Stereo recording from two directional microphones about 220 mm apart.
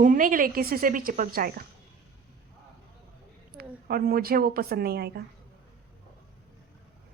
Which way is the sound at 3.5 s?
45° right (ahead or behind).